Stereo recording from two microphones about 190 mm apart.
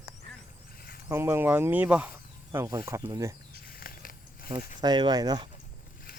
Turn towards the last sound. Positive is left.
turn(degrees=-20)  # may be behind; listen again after turning